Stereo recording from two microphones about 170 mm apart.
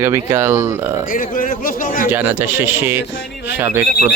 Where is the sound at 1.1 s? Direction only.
55° left (ahead or behind).